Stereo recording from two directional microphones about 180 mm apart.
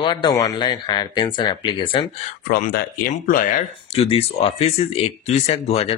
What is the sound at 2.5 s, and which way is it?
Speech, 55° left (ahead or behind).